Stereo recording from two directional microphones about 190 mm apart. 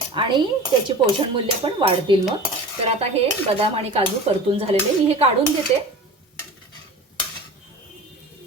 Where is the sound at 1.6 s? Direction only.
25° right (ahead or behind).